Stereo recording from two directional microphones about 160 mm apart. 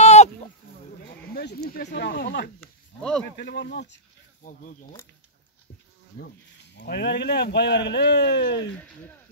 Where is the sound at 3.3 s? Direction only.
90° left.